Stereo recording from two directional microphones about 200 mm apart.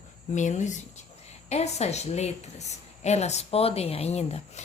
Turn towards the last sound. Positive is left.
turn(degrees=30)  # may be behind; listen again after turning